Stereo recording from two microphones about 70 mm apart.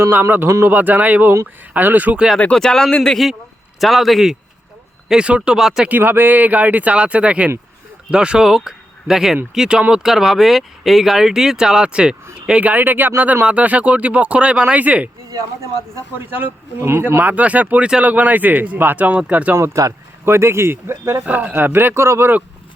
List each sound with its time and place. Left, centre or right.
0.0 s speech: right
2.4 s a man's voice: centre
5.0 s speech: centre
5.5 s a man's voice: centre
6.0 s speech: right
15.3 s speech: right
16.1 s speech: right
17.3 s speech: right
19.5 s speech: right
21.2 s speech: right